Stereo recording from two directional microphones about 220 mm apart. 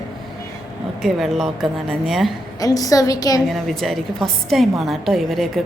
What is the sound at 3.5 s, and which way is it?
A woman's voice, centre (ahead or behind).